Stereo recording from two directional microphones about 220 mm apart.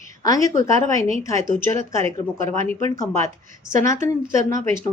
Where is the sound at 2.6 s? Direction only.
30° right (ahead or behind).